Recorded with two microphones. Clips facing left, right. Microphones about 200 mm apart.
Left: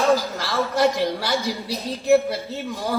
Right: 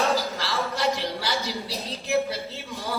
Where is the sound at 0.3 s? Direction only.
50° left (ahead or behind).